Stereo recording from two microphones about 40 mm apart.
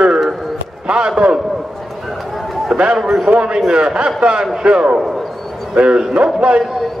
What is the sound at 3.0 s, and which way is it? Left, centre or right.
Speech, centre.